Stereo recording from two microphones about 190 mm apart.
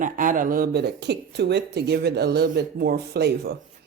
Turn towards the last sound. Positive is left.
turn(degrees=-60)  # may be behind; listen again after turning